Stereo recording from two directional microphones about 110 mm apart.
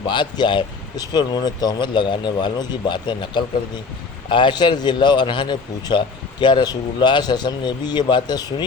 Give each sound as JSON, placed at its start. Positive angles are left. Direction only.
{"t": 0.1, "sound": "speech", "side_deg": 45}